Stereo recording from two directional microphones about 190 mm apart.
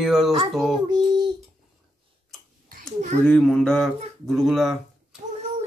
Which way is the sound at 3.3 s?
5° left (ahead or behind).